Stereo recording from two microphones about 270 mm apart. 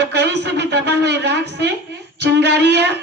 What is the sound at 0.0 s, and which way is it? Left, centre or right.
A woman's voice, right.